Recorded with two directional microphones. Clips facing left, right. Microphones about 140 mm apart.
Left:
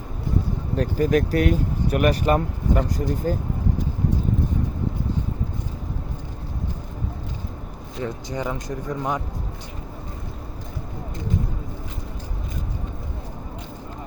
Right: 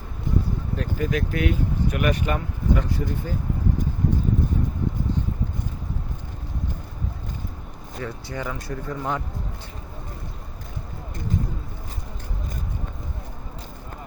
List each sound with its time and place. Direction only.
0.8 s speech: 40° left (ahead or behind)
8.0 s speech: 20° left (ahead or behind)